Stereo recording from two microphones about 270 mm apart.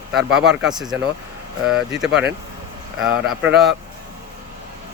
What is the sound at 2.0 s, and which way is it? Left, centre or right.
Speech, centre.